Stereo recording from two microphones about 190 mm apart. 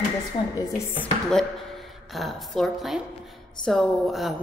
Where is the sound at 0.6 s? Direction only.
15° left (ahead or behind).